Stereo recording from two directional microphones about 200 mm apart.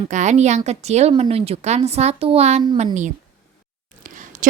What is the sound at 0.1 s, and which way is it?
A woman's voice, 35° right (ahead or behind).